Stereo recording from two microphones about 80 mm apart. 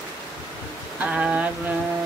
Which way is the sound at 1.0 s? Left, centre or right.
Centre.